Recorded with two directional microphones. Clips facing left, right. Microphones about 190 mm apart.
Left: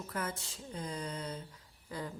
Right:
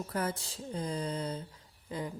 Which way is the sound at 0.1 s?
35° right (ahead or behind).